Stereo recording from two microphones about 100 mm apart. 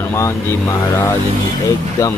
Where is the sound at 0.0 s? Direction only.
25° left (ahead or behind).